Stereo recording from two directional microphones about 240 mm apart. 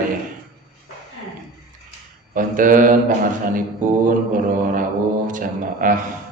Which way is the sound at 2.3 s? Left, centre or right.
Right.